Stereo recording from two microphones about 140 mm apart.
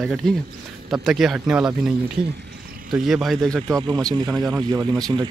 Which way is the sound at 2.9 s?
Centre (ahead or behind).